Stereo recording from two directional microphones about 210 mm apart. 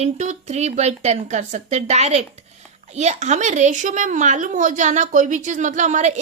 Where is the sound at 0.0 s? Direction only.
35° right (ahead or behind).